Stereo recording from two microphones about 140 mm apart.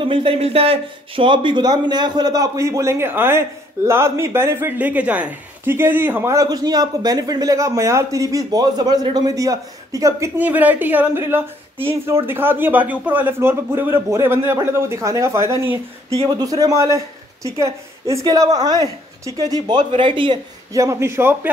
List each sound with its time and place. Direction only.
0.0 s speech: 40° right (ahead or behind)
20.7 s speech: 20° right (ahead or behind)